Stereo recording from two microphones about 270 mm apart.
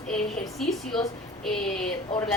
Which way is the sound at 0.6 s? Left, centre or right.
Centre.